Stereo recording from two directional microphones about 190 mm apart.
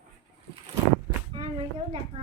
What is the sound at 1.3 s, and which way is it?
Speech, 30° right (ahead or behind).